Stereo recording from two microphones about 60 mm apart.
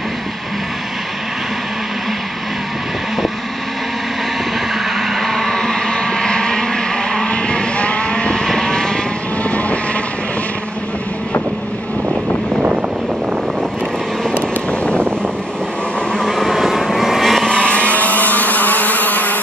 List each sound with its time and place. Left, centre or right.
4.8 s vehicle: centre
9.4 s vehicle: left
14.3 s vehicle: centre
16.1 s vehicle: centre
17.5 s vehicle: centre